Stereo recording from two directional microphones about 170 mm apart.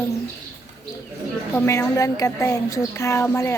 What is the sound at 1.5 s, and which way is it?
A woman's voice, 15° left (ahead or behind).